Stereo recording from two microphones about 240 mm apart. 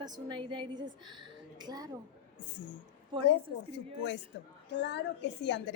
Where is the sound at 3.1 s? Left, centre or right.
Right.